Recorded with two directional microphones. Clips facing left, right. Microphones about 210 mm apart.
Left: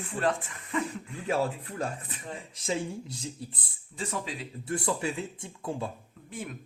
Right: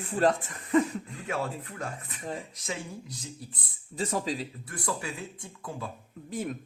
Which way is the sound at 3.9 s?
40° right (ahead or behind).